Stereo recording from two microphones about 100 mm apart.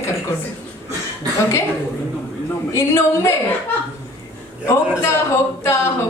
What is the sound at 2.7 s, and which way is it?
Speech, 25° left (ahead or behind).